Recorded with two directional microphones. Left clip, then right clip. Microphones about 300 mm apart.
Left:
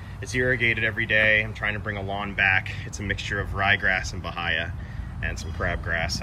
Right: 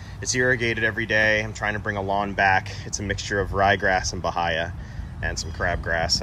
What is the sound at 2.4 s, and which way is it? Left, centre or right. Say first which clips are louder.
Speech: even; centre.